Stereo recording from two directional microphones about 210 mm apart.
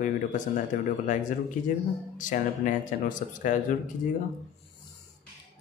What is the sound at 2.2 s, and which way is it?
Speech, 35° left (ahead or behind).